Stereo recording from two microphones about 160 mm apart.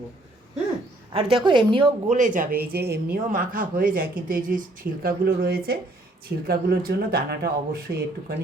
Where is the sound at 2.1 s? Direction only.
50° right (ahead or behind).